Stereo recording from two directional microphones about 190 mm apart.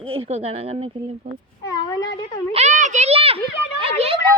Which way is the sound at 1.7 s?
20° left (ahead or behind).